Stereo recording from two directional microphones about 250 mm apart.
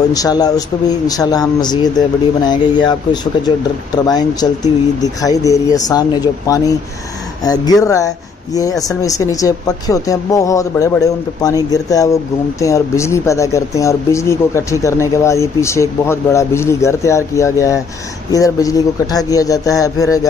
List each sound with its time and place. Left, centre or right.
0.1 s speech: centre